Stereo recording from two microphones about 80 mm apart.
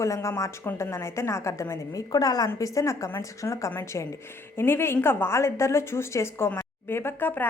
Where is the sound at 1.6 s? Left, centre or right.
Left.